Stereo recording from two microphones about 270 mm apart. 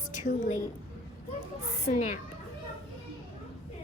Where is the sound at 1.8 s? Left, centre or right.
Left.